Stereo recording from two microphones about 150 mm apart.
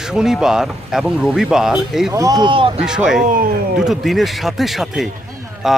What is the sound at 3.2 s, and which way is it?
Speech, 65° right (ahead or behind).